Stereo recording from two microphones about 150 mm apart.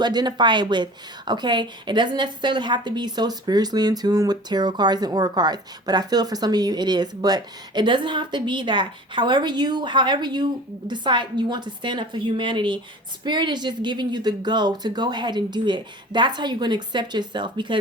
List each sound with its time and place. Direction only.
0.0 s a woman's voice: 30° right (ahead or behind)